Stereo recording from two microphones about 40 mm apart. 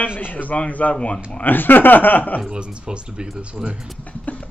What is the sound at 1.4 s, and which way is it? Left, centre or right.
Speech, left.